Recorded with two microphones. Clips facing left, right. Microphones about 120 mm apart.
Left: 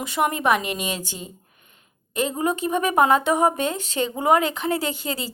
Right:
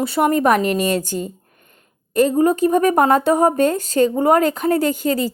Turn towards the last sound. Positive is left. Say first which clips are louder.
# right 9 dB
turn(degrees=-45)  # may be behind; listen again after turning